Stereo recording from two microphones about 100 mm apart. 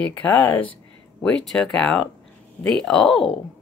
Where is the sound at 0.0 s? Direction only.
15° left (ahead or behind).